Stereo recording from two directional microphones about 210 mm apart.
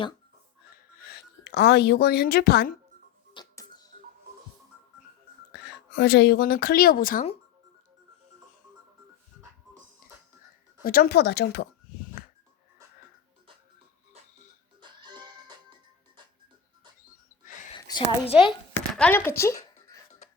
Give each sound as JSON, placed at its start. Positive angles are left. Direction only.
{"t": 0.9, "sound": "speech", "side_deg": 45}
{"t": 3.3, "sound": "music", "side_deg": 20}
{"t": 5.5, "sound": "speech", "side_deg": 50}
{"t": 10.8, "sound": "speech", "side_deg": 45}
{"t": 14.8, "sound": "music", "side_deg": -20}
{"t": 17.7, "sound": "a sound", "side_deg": 20}
{"t": 18.9, "sound": "speech", "side_deg": 10}
{"t": 19.4, "sound": "a sound", "side_deg": 15}
{"t": 20.1, "sound": "music", "side_deg": 35}